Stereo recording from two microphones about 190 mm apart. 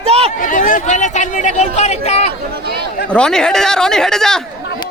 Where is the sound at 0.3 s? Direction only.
45° left (ahead or behind).